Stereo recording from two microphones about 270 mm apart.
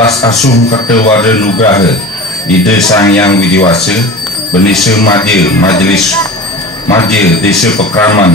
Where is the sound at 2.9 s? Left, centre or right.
Centre.